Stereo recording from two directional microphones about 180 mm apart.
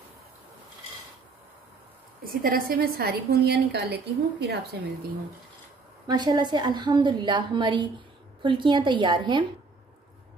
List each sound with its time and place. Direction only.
2.4 s a woman's voice: 55° right (ahead or behind)
6.0 s a woman's voice: 25° right (ahead or behind)